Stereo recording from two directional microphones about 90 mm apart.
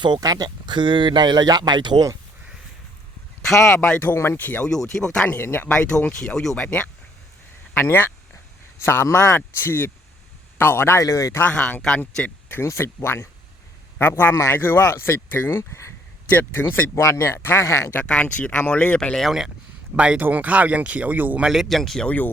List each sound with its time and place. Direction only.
0.0 s speech: 50° right (ahead or behind)
3.8 s speech: 15° left (ahead or behind)
4.7 s speech: 5° left (ahead or behind)
5.2 s speech: 20° left (ahead or behind)
6.1 s speech: 5° left (ahead or behind)
7.7 s speech: 25° left (ahead or behind)
11.4 s speech: 15° left (ahead or behind)
12.5 s speech: 25° left (ahead or behind)
16.9 s speech: 35° left (ahead or behind)
17.9 s speech: 15° left (ahead or behind)
20.0 s speech: 15° right (ahead or behind); by 22.3 s 15° left (ahead or behind)